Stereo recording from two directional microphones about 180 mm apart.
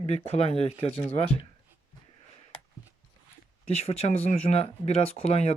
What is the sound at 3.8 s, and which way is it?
Speech, 35° left (ahead or behind).